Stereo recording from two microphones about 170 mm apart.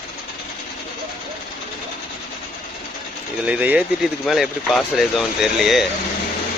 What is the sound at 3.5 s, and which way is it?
Speech, 10° right (ahead or behind).